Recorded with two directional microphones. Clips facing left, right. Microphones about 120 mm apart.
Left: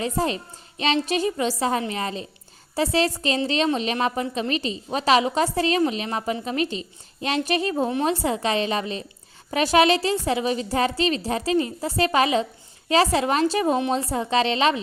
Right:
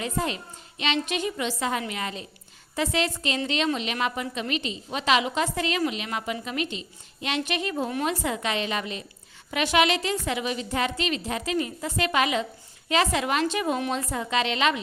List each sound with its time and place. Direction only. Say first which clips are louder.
0.0 s a woman's voice: left 4 dB; 35° left (ahead or behind)